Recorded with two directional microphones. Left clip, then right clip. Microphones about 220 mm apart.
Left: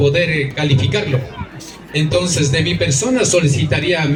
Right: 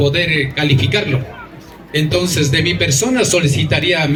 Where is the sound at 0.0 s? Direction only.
55° right (ahead or behind).